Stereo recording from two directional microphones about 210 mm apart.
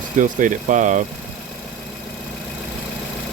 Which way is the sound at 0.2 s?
40° right (ahead or behind).